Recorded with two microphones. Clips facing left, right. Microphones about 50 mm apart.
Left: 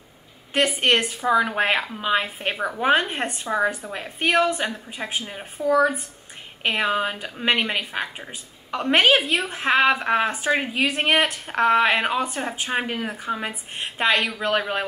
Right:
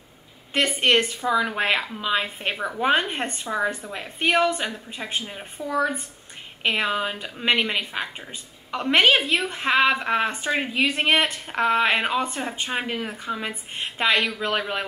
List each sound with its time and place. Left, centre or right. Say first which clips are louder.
0.7 s a woman's voice: right 3 dB; centre
1.1 s a woman's voice: left 2 dB; left
1.7 s a woman's voice: left 1 dB; centre